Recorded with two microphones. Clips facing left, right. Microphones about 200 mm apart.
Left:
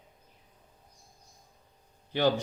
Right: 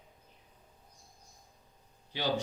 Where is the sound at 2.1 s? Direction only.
55° left (ahead or behind).